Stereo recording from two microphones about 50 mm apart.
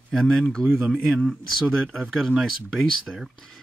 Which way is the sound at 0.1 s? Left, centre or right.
Centre.